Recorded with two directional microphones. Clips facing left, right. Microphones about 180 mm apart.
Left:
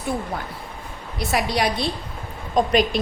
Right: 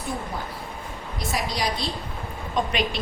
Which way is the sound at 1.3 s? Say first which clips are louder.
Left 5 dB; 65° left (ahead or behind).